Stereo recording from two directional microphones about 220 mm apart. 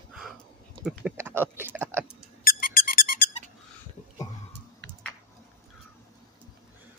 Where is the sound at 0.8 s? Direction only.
Centre (ahead or behind).